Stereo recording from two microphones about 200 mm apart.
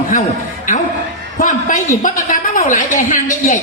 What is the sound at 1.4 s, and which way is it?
A woman's voice, 40° left (ahead or behind).